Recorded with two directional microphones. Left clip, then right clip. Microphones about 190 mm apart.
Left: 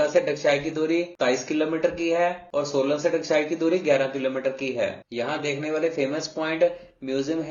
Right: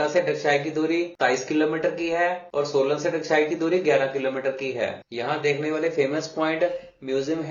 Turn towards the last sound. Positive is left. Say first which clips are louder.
# right 1 dB
turn(degrees=35)  # may be behind; listen again after turning